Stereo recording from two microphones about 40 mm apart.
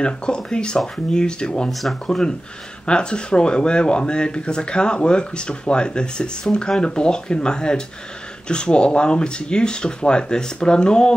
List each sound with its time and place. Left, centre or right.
0.0 s speech: left
1.7 s speech: centre
2.0 s speech: centre